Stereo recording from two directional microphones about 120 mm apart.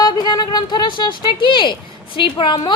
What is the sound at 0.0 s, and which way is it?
A woman's voice, 35° left (ahead or behind).